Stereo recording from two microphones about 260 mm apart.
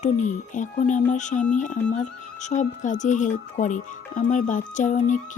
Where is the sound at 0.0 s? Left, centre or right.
Left.